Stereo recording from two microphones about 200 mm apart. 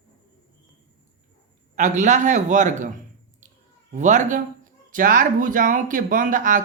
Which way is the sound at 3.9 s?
35° right (ahead or behind).